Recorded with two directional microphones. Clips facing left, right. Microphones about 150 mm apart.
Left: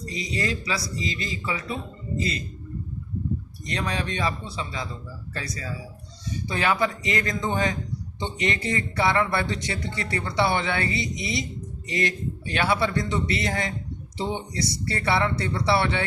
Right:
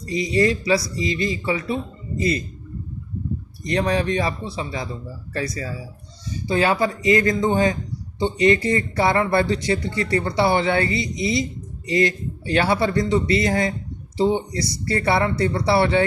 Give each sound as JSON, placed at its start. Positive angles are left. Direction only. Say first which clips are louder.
{"t": 0.1, "sound": "speech", "louder": "right 10 dB", "side_deg": -30}
{"t": 3.7, "sound": "speech", "louder": "right 8 dB", "side_deg": -30}